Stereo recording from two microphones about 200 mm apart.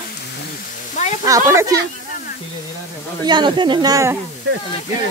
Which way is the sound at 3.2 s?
20° right (ahead or behind).